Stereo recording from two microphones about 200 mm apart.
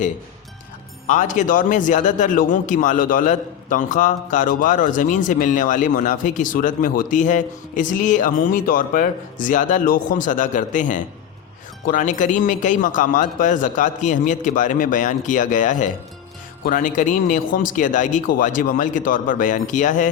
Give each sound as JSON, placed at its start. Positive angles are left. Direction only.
{"t": 1.0, "sound": "a man's voice", "side_deg": 40}